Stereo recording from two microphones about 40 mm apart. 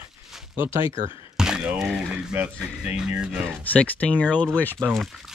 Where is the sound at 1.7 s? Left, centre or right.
Centre.